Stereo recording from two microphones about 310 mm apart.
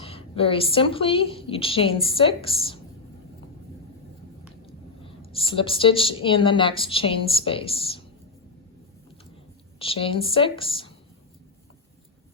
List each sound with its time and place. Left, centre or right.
0.0 s a woman's voice: centre
4.6 s a woman's voice: centre
9.7 s a woman's voice: centre